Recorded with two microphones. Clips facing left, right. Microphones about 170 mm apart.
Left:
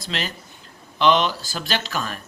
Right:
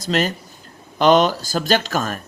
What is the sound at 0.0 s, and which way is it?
Speech, 45° right (ahead or behind).